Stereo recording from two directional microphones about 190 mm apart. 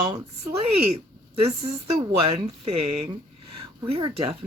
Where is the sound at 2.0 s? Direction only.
25° right (ahead or behind).